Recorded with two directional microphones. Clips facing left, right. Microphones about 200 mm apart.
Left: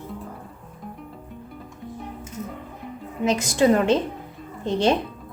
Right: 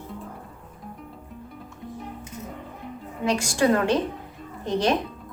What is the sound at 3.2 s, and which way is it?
A woman's voice, 20° left (ahead or behind).